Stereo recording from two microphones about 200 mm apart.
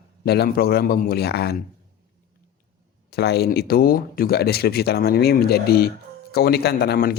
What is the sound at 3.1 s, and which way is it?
Speech, 55° left (ahead or behind).